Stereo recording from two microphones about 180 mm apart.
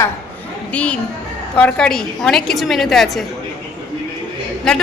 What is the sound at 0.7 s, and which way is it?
A woman's voice, 5° left (ahead or behind).